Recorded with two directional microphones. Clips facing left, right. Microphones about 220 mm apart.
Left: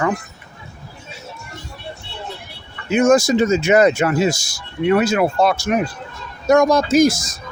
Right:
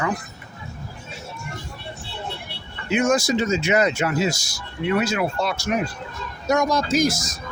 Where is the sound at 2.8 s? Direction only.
45° left (ahead or behind).